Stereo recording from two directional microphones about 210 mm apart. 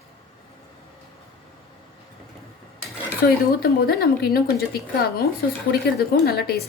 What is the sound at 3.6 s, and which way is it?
A woman's voice, 50° left (ahead or behind).